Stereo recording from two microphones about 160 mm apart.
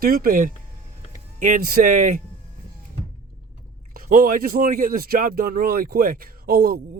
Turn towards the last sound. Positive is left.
turn(degrees=-70)  # may be behind; listen again after turning